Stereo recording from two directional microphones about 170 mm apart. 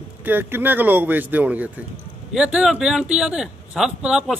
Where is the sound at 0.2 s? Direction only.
10° right (ahead or behind).